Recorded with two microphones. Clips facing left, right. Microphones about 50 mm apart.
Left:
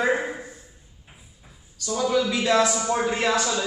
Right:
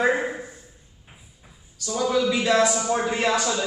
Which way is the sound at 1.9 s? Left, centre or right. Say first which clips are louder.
Right 1 dB; centre.